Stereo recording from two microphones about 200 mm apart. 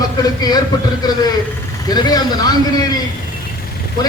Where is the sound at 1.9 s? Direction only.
20° left (ahead or behind).